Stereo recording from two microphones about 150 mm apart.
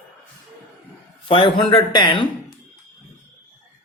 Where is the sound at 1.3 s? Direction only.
35° left (ahead or behind).